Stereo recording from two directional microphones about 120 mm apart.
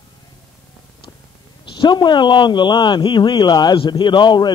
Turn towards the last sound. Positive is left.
turn(degrees=40)  # may be behind; listen again after turning